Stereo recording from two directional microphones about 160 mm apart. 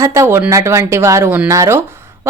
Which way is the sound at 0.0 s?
15° right (ahead or behind).